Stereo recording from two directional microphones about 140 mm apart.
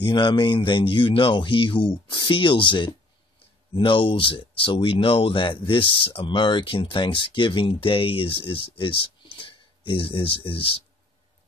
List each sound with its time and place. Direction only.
0.0 s speech: 35° left (ahead or behind)